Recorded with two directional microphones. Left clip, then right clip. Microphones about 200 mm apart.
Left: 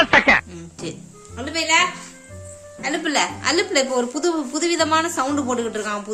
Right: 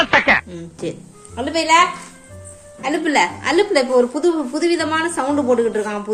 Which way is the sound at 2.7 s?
5° left (ahead or behind).